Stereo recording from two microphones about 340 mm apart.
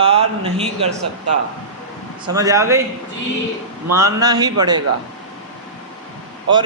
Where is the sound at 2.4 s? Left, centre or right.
Centre.